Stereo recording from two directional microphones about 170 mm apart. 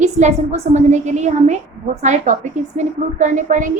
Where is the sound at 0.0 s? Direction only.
40° right (ahead or behind).